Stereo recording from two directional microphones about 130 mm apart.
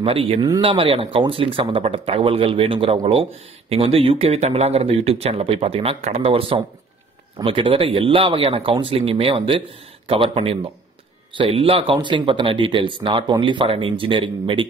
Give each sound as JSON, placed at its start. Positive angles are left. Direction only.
{"t": 0.0, "sound": "speech", "side_deg": -45}